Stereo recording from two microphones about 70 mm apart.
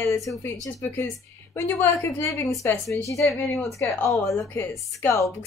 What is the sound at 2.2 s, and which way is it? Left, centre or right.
Speech, left.